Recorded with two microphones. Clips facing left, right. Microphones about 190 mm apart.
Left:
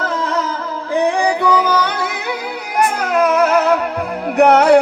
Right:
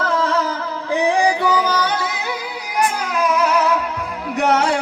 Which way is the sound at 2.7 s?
60° left (ahead or behind).